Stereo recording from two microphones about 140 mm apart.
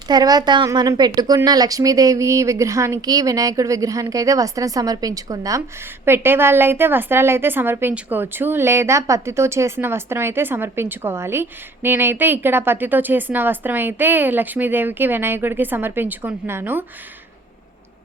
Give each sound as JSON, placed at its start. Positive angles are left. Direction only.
{"t": 0.1, "sound": "a woman's voice", "side_deg": -30}